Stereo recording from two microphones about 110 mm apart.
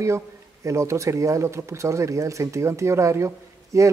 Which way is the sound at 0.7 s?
25° right (ahead or behind).